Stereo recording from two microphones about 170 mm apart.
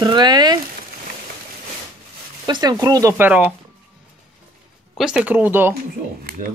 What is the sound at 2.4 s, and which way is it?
Speech, 25° right (ahead or behind).